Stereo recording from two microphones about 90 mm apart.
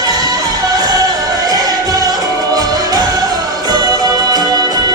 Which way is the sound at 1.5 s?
45° right (ahead or behind).